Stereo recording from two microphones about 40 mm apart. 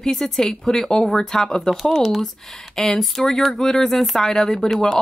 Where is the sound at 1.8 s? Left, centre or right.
Centre.